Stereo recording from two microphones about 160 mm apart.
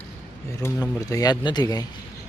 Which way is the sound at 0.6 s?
20° left (ahead or behind).